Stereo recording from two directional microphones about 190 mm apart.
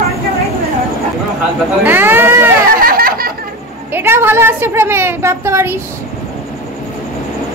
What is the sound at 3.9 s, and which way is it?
A woman's voice, 10° right (ahead or behind).